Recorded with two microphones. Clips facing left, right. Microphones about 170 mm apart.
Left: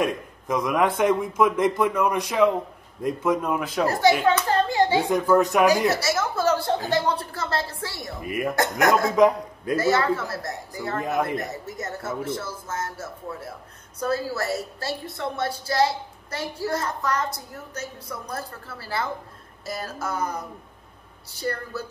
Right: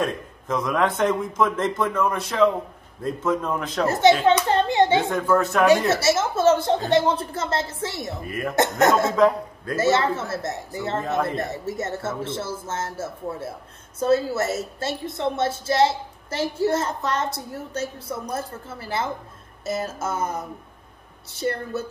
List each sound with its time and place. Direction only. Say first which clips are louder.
0.0 s a man's voice: left 1 dB; 10° left (ahead or behind)
3.8 s a woman's voice: right 3 dB; 25° right (ahead or behind)
4.4 s hands: right 2 dB; 25° right (ahead or behind)
5.3 s a man's voice: left 1 dB; 15° left (ahead or behind)
5.9 s a woman's voice: right 3 dB; 25° right (ahead or behind)
8.2 s a man's voice: left 5 dB; 15° left (ahead or behind)
8.5 s a woman's voice: right 3 dB; 25° right (ahead or behind)
9.1 s a man's voice: even; 15° left (ahead or behind)
9.8 s a woman's voice: right 1 dB; 25° right (ahead or behind)